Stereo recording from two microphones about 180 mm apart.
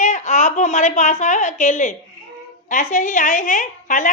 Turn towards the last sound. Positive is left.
turn(degrees=45)  # may be behind; listen again after turning